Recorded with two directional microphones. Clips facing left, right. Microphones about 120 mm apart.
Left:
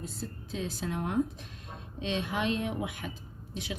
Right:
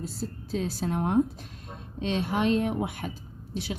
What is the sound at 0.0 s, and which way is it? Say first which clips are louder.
Speech: right 5 dB; 35° right (ahead or behind).